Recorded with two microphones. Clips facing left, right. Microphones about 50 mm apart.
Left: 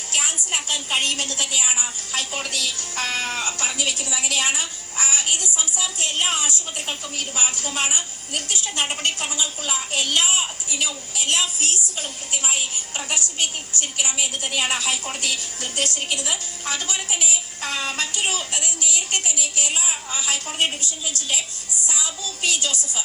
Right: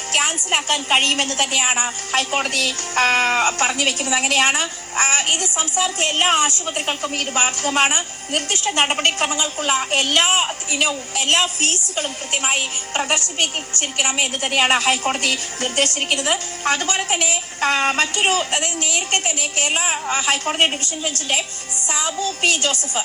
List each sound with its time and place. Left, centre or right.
0.1 s a woman's voice: right